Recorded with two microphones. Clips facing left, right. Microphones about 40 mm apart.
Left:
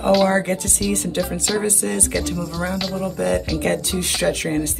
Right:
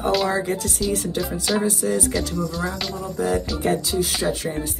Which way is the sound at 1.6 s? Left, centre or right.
Left.